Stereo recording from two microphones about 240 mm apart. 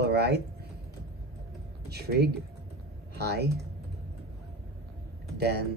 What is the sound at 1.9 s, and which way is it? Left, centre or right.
Speech, right.